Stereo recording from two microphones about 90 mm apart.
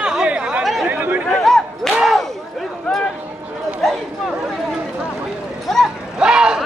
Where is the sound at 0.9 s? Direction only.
20° right (ahead or behind).